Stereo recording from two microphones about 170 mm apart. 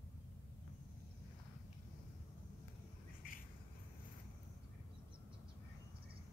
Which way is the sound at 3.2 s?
55° left (ahead or behind).